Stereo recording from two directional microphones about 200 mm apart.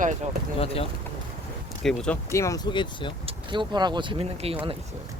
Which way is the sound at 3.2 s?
25° right (ahead or behind).